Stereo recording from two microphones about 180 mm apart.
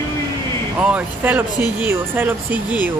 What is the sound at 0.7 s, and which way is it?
Speech, 10° right (ahead or behind).